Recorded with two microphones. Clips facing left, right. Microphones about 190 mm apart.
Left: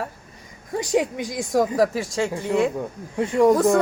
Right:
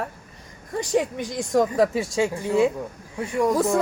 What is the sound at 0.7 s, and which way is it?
Speech, 10° left (ahead or behind).